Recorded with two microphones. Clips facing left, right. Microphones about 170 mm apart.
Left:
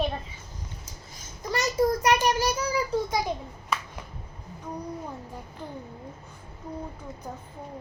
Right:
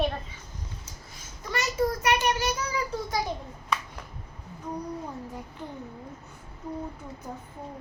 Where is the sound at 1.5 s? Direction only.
35° left (ahead or behind).